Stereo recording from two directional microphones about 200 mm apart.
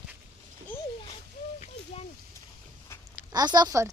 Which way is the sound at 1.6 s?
30° left (ahead or behind).